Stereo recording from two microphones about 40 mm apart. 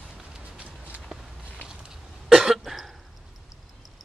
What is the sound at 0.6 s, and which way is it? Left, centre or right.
Walk, right.